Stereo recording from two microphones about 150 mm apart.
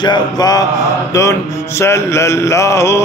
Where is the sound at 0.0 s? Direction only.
25° left (ahead or behind).